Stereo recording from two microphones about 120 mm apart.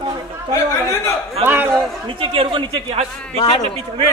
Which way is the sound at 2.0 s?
45° right (ahead or behind).